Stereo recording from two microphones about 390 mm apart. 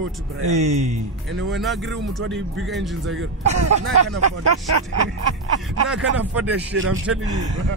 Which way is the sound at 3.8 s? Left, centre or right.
Right.